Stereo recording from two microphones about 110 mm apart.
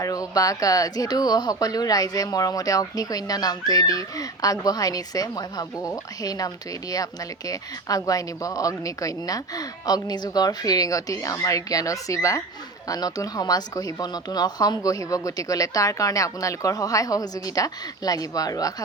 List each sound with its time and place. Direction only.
0.0 s speech: 35° left (ahead or behind)